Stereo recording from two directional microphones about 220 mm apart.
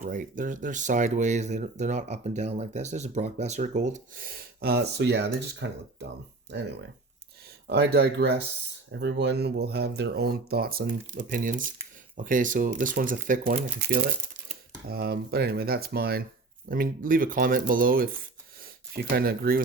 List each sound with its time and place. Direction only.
0.0 s speech: 35° right (ahead or behind)